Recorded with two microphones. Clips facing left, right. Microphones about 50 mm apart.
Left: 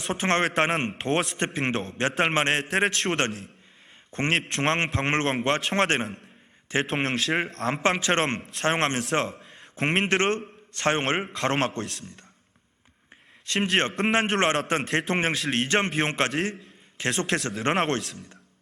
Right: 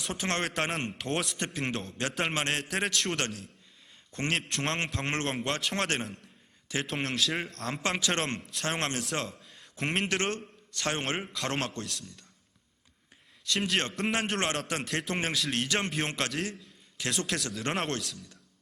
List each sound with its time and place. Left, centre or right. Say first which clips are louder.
0.0 s a man's voice: left 7 dB; left
13.4 s a man's voice: left 5 dB; left